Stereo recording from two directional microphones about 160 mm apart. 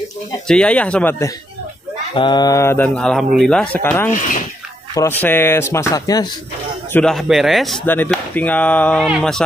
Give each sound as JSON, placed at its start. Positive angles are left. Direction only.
{"t": 0.5, "sound": "speech", "side_deg": 5}
{"t": 2.1, "sound": "speech", "side_deg": 30}
{"t": 6.9, "sound": "a man's voice", "side_deg": 5}
{"t": 7.8, "sound": "a man's voice", "side_deg": 10}